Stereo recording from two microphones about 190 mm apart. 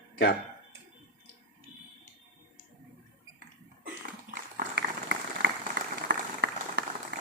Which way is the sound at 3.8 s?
55° right (ahead or behind).